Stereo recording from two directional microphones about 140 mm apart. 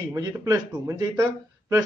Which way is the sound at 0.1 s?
25° right (ahead or behind).